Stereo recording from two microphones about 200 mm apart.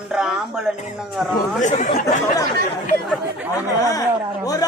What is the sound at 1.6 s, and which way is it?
Speech, 35° left (ahead or behind).